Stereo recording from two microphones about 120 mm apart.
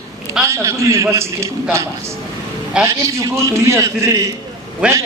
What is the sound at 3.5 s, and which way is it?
Speech, 25° right (ahead or behind).